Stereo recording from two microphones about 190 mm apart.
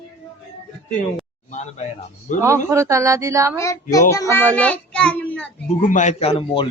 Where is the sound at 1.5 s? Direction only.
35° left (ahead or behind).